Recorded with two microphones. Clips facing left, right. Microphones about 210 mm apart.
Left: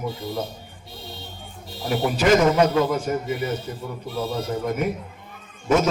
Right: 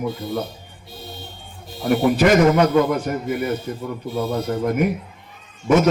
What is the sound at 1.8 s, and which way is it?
Speech, 55° right (ahead or behind).